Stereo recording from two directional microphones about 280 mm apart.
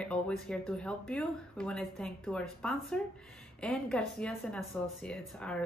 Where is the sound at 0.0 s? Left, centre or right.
Centre.